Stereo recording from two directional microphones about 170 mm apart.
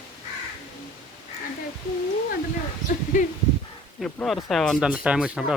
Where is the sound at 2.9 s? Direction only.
60° left (ahead or behind).